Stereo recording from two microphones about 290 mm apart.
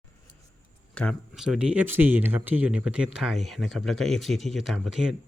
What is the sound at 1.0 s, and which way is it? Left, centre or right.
Speech, centre.